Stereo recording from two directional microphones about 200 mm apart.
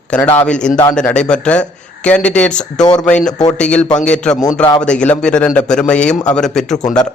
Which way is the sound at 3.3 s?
20° left (ahead or behind).